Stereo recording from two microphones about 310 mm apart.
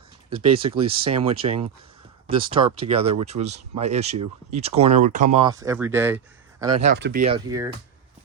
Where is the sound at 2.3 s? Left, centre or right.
Centre.